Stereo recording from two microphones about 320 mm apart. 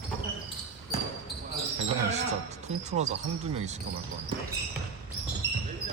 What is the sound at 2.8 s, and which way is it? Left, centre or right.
Speech, right.